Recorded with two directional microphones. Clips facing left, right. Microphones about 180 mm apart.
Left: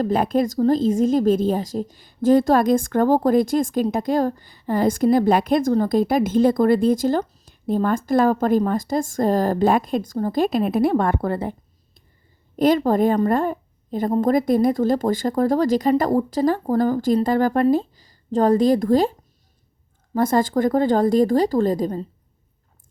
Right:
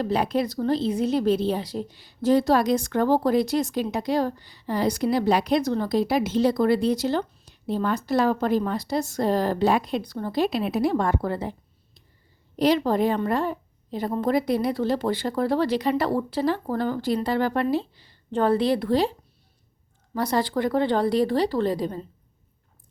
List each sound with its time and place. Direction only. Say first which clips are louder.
0.0 s speech: left 4 dB; 50° left (ahead or behind)
12.5 s speech: left 4 dB; 50° left (ahead or behind)
20.1 s speech: left 5 dB; 50° left (ahead or behind)